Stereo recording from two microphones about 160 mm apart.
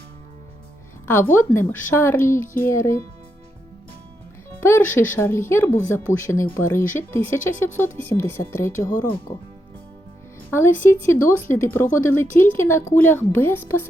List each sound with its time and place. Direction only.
1.0 s speech: 15° left (ahead or behind)
4.6 s speech: 15° left (ahead or behind)
10.5 s speech: 15° left (ahead or behind)